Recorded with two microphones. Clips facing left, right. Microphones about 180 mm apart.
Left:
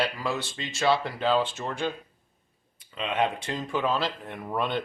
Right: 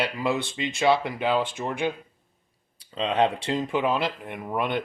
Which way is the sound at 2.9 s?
30° right (ahead or behind).